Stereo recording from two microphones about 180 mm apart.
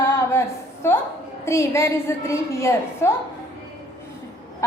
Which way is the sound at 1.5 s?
15° left (ahead or behind).